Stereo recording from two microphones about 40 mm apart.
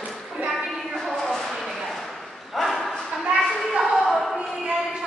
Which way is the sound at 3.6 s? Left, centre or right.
Centre.